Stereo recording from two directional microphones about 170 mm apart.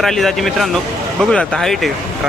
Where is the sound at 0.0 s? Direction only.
Centre (ahead or behind).